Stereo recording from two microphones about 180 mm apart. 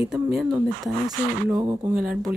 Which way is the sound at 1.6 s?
20° right (ahead or behind).